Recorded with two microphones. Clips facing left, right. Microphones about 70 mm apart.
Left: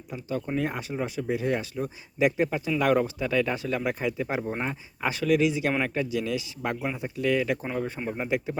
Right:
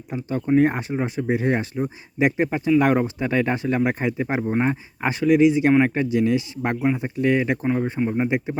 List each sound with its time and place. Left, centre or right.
0.1 s speech: right
7.9 s speech: centre
8.2 s speech: right